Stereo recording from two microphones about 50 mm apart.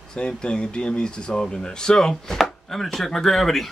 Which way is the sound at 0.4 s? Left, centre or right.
Centre.